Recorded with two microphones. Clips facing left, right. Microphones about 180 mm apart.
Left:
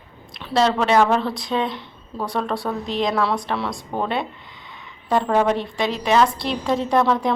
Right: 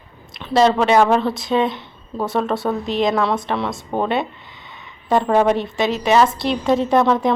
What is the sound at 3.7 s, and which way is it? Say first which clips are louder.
Speech: right 4 dB; 25° right (ahead or behind).